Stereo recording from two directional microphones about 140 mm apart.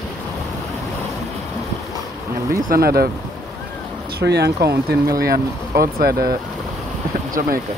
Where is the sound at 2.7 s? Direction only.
90° right.